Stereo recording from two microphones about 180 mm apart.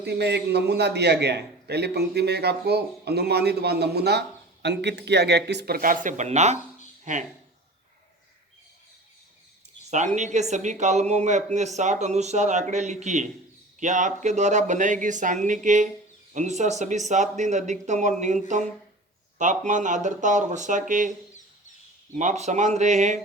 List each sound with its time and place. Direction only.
0.0 s a man's voice: 70° right (ahead or behind); by 7.3 s 40° right (ahead or behind)
10.2 s a man's voice: 40° right (ahead or behind)
22.1 s a man's voice: 40° right (ahead or behind)